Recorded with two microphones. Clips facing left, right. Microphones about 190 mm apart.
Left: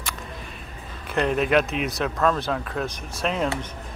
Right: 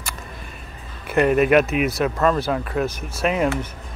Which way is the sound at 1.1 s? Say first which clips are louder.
Right 5 dB; 5° right (ahead or behind).